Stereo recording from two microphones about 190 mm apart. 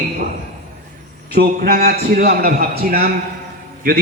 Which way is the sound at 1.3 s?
50° right (ahead or behind).